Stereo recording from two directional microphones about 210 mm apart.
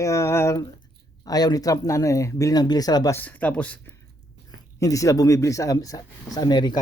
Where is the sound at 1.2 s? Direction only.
20° left (ahead or behind).